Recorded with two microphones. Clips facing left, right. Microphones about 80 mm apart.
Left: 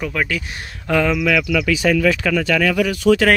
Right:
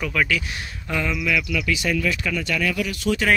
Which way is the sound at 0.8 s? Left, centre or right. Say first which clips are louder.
Left 8 dB; left.